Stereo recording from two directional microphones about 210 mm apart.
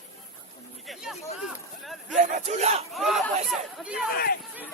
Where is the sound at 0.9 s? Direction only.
Centre (ahead or behind).